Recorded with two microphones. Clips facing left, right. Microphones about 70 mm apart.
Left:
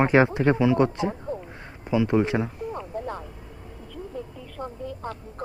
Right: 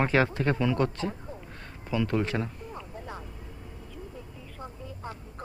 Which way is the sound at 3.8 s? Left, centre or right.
Left.